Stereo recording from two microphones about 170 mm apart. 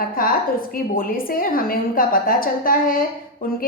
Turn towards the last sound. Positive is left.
turn(degrees=55)  # may be behind; listen again after turning